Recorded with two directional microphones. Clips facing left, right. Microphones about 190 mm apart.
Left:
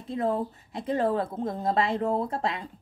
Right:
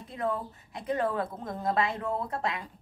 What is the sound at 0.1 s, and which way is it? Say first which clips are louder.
A woman's voice: left 5 dB; 30° left (ahead or behind).